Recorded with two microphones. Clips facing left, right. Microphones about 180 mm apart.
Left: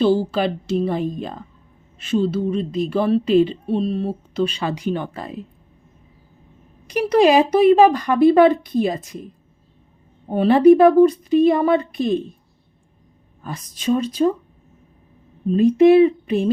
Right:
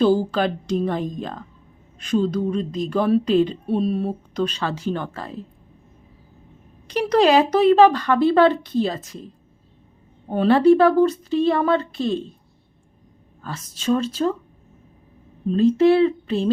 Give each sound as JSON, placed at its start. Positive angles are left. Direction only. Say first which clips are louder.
{"t": 0.3, "sound": "a woman's voice", "louder": "left 1 dB", "side_deg": 5}
{"t": 4.4, "sound": "speech", "louder": "left 3 dB", "side_deg": 10}
{"t": 6.8, "sound": "speech", "louder": "left 2 dB", "side_deg": 10}
{"t": 13.4, "sound": "speech", "louder": "left 2 dB", "side_deg": 15}
{"t": 15.4, "sound": "speech", "louder": "left 3 dB", "side_deg": 15}